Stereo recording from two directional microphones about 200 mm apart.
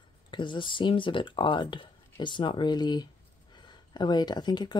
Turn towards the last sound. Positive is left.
turn(degrees=20)  # may be behind; listen again after turning